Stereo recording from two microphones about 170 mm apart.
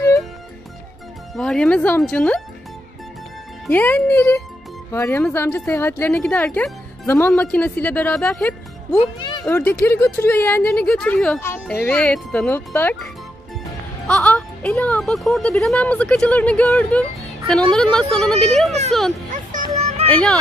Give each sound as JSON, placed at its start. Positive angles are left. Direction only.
{"t": 1.3, "sound": "a woman's voice", "side_deg": 5}
{"t": 3.6, "sound": "a woman's voice", "side_deg": 10}
{"t": 9.2, "sound": "a sound", "side_deg": 25}
{"t": 9.5, "sound": "a woman's voice", "side_deg": 10}
{"t": 19.5, "sound": "music", "side_deg": -50}
{"t": 20.1, "sound": "speech", "side_deg": 5}